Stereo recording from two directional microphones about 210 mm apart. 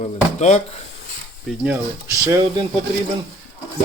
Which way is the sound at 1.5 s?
5° right (ahead or behind).